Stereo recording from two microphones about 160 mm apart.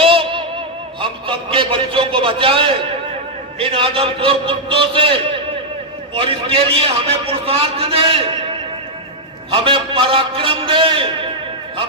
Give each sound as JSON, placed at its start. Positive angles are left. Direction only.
{"t": 0.0, "sound": "music", "side_deg": -35}
{"t": 1.0, "sound": "a sound", "side_deg": -30}
{"t": 3.6, "sound": "a man's voice", "side_deg": -35}
{"t": 9.5, "sound": "a man's voice", "side_deg": -35}